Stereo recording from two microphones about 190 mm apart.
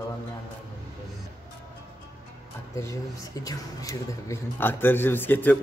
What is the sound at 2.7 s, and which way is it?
A man's voice, 15° left (ahead or behind).